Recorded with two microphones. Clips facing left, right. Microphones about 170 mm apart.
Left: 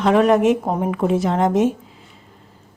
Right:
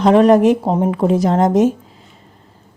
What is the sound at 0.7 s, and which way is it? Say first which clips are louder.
Speech: right 5 dB; 25° right (ahead or behind).